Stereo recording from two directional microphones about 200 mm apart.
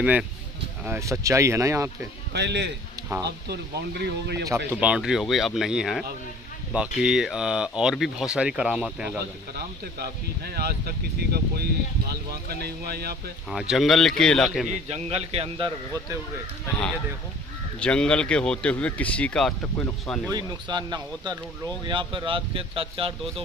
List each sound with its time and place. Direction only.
0.8 s speech: 15° right (ahead or behind)
2.3 s speech: 60° right (ahead or behind)
4.5 s speech: 10° right (ahead or behind)
9.9 s speech: 50° right (ahead or behind)
13.5 s speech: centre (ahead or behind)
14.7 s a man's voice: 35° right (ahead or behind)
17.7 s speech: 5° left (ahead or behind)
20.2 s speech: 20° right (ahead or behind)